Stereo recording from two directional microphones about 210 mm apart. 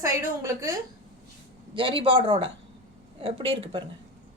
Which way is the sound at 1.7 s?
25° right (ahead or behind).